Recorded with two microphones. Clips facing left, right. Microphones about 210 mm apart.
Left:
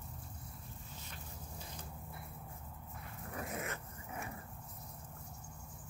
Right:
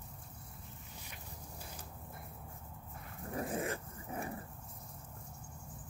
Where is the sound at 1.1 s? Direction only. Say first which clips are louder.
Right 1 dB; 10° right (ahead or behind).